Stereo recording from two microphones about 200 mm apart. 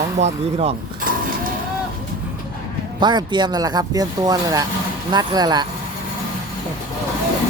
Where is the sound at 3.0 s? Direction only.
20° right (ahead or behind).